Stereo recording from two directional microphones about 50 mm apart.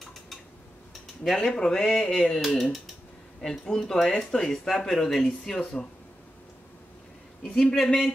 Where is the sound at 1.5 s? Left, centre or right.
Centre.